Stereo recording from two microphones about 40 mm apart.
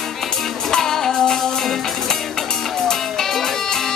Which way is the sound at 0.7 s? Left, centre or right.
Centre.